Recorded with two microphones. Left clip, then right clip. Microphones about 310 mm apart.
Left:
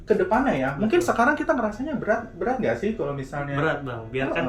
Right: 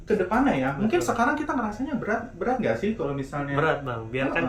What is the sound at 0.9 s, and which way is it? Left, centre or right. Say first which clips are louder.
Speech: left 4 dB; centre.